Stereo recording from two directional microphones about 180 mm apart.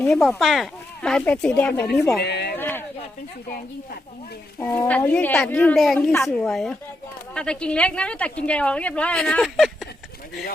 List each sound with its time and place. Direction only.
0.0 s speech: centre (ahead or behind)
2.2 s speech: 65° left (ahead or behind)
2.6 s a sound: 10° left (ahead or behind)
4.6 s a woman's voice: 10° left (ahead or behind)